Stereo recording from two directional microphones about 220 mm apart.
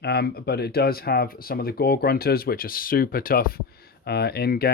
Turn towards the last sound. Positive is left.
turn(degrees=45)  # may be behind; listen again after turning